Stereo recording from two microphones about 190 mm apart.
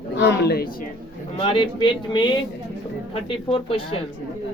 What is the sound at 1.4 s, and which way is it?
Speech, 25° left (ahead or behind).